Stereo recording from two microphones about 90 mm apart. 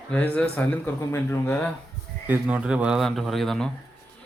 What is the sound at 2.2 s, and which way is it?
Speech, 20° right (ahead or behind).